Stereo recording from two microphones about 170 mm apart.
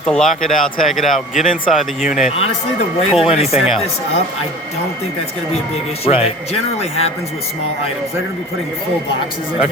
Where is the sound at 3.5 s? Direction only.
Centre (ahead or behind).